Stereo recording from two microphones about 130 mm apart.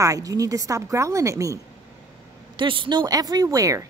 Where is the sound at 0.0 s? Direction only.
25° right (ahead or behind).